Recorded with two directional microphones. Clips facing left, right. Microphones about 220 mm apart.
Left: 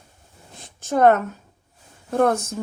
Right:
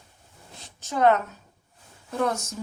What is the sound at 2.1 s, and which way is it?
Speech, 55° left (ahead or behind).